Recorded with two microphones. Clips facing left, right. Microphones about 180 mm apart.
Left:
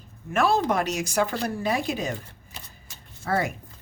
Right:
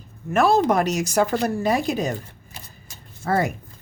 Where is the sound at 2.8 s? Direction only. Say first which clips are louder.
Right 4 dB; 40° right (ahead or behind).